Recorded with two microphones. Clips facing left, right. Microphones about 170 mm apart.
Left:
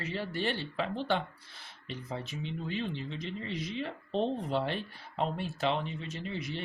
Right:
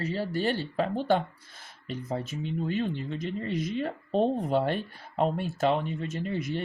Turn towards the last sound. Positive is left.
turn(degrees=-45)  # may be behind; listen again after turning